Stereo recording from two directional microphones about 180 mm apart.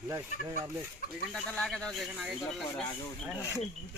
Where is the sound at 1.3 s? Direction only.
5° left (ahead or behind).